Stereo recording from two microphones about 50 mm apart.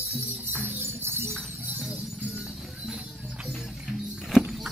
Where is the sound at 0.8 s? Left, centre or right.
Right.